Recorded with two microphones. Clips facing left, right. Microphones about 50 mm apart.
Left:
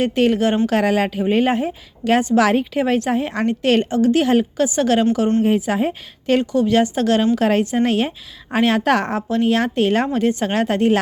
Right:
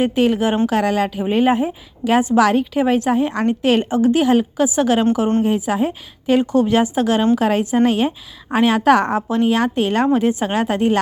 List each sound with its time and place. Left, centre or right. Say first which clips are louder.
0.0 s a woman's voice: even; centre
0.7 s a woman's voice: even; centre
3.9 s a woman's voice: right 1 dB; centre
4.2 s a woman's voice: right 1 dB; centre
6.4 s a woman's voice: right 2 dB; right
6.7 s a woman's voice: even; centre